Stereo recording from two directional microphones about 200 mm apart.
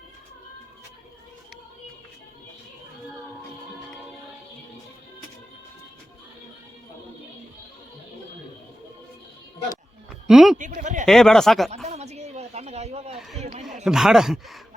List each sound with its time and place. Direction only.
10.2 s speech: centre (ahead or behind)
10.6 s speech: 40° right (ahead or behind)
11.0 s speech: centre (ahead or behind)
11.9 s a sound: 35° right (ahead or behind)
13.1 s a sound: centre (ahead or behind)
13.8 s speech: centre (ahead or behind)